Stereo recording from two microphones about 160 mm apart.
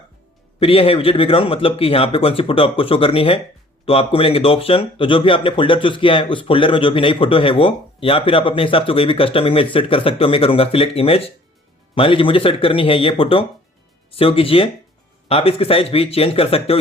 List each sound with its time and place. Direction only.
0.6 s speech: 35° left (ahead or behind)